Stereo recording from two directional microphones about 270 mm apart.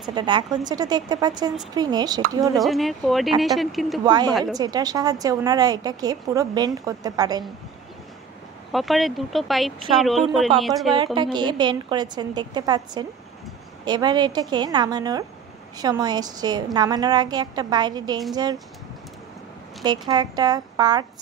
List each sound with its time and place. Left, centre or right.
0.0 s a woman's voice: centre
2.6 s speech: centre
4.0 s a woman's voice: centre
4.3 s speech: centre
4.6 s a woman's voice: centre
8.7 s speech: centre
11.3 s a woman's voice: centre
19.8 s a woman's voice: centre